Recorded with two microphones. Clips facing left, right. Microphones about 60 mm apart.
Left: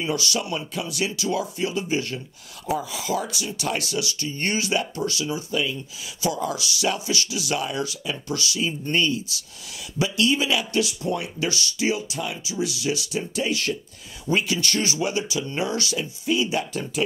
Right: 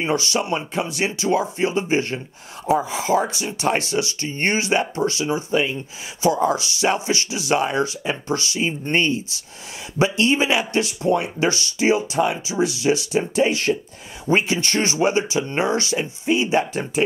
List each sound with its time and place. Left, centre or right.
0.0 s speech: right